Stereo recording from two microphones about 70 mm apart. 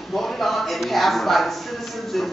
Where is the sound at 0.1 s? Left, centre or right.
Centre.